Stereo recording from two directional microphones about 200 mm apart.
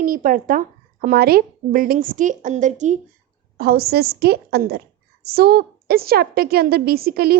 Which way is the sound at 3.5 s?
50° right (ahead or behind).